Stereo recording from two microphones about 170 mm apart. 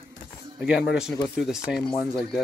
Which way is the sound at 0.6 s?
5° right (ahead or behind).